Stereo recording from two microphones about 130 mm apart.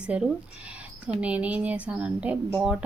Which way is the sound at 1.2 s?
10° right (ahead or behind).